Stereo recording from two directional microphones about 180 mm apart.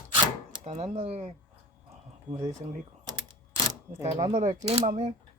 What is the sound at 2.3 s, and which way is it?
Speech, 40° right (ahead or behind).